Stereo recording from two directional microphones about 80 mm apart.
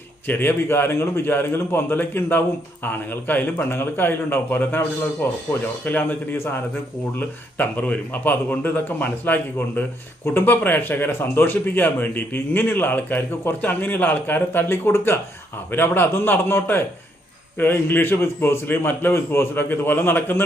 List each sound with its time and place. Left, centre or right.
0.3 s speech: left